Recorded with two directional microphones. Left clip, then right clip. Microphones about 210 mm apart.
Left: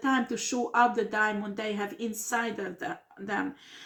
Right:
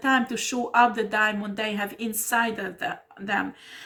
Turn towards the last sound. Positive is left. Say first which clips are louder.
# right 5 dB
turn(degrees=-40)  # may be behind; listen again after turning